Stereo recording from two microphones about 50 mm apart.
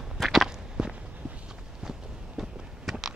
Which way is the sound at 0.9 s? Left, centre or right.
Right.